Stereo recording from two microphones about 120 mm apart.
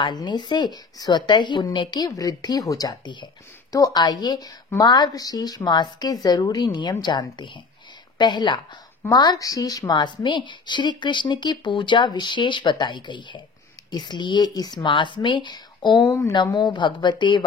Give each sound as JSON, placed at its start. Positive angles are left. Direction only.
{"t": 0.0, "sound": "a woman's voice", "side_deg": 40}
{"t": 16.1, "sound": "speech", "side_deg": 25}
{"t": 16.5, "sound": "a woman's voice", "side_deg": 40}